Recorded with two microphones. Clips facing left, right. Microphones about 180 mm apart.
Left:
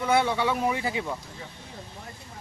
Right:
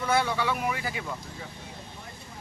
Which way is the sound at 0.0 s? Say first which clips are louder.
Left 3 dB; 20° left (ahead or behind).